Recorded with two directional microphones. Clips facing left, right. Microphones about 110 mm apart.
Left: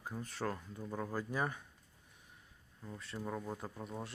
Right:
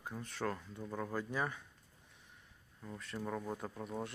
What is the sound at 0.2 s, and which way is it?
Speech, 40° left (ahead or behind).